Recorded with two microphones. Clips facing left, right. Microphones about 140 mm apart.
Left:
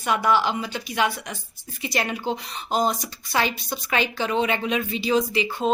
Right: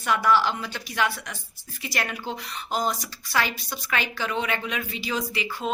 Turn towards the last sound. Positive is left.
turn(degrees=25)  # may be behind; listen again after turning